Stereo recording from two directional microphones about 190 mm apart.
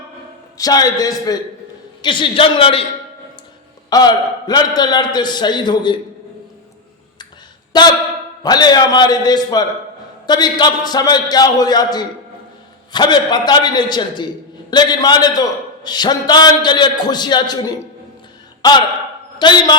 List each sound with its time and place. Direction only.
0.5 s a man's voice: 20° left (ahead or behind)
3.8 s a man's voice: 20° left (ahead or behind)
7.7 s a man's voice: 20° left (ahead or behind)